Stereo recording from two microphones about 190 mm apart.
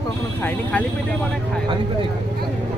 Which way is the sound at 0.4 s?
10° left (ahead or behind).